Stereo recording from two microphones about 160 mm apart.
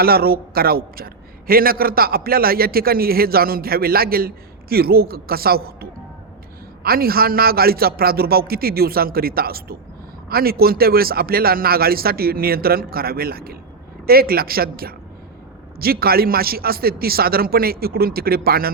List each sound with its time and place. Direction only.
0.0 s a man's voice: 75° right (ahead or behind)